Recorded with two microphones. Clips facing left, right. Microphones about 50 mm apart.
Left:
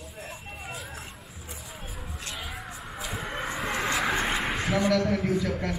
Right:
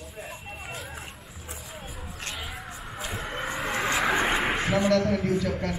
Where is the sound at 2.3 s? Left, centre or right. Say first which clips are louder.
Even; centre.